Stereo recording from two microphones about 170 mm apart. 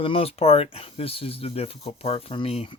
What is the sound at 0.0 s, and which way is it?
Speech, 35° left (ahead or behind).